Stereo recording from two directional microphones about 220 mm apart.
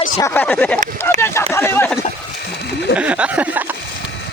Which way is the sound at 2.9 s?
5° right (ahead or behind).